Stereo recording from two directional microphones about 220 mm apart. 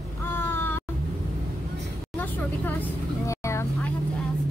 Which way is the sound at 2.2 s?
10° left (ahead or behind).